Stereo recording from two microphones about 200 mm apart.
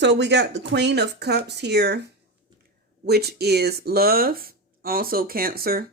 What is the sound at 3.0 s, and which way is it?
Speech, 55° right (ahead or behind).